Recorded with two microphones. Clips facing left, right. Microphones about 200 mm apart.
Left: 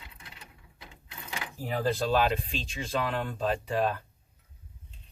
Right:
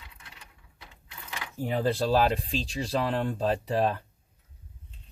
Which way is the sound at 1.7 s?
30° right (ahead or behind).